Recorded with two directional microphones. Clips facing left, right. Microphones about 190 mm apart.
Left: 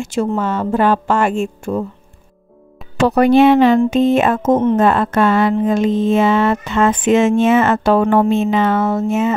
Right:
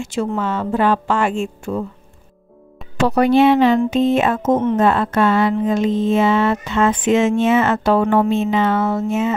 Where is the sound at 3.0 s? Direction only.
50° left (ahead or behind).